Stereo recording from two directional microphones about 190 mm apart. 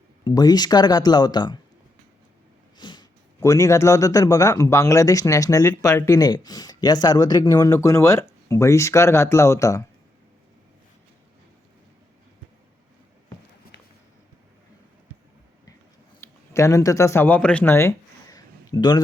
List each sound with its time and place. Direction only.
0.3 s speech: 20° left (ahead or behind)
2.7 s a man's voice: 25° left (ahead or behind)
16.5 s speech: 15° left (ahead or behind)